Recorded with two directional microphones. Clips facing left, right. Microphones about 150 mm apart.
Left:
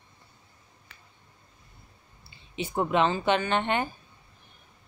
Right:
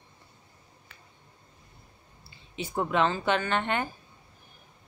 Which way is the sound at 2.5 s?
20° left (ahead or behind).